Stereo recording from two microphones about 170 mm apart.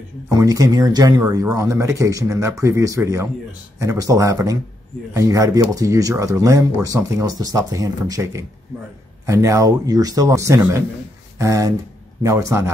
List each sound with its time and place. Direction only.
0.4 s speech: 20° right (ahead or behind)